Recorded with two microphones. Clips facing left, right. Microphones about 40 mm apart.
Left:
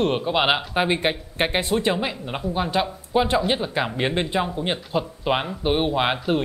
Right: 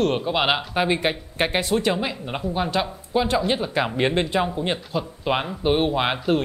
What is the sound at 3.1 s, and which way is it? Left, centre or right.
Speech, left.